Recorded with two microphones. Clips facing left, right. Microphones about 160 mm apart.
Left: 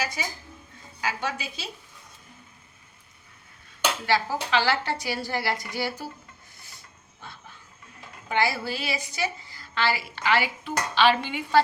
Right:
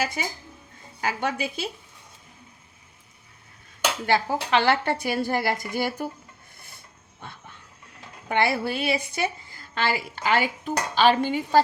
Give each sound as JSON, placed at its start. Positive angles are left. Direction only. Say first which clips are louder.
{"t": 0.0, "sound": "a woman's voice", "louder": "right 3 dB", "side_deg": -55}
{"t": 4.0, "sound": "a woman's voice", "louder": "right 3 dB", "side_deg": -55}
{"t": 8.3, "sound": "a woman's voice", "louder": "right 3 dB", "side_deg": -60}